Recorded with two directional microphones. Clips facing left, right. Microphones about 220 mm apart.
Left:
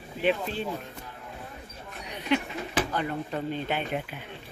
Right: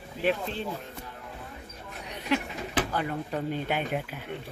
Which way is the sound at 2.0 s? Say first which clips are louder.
Left 1 dB; centre (ahead or behind).